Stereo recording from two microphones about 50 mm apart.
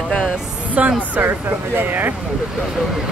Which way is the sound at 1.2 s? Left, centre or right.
Right.